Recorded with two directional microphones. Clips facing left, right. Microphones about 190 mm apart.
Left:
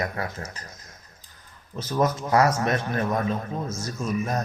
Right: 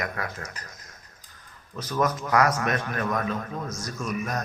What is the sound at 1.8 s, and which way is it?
A man's voice, 30° left (ahead or behind).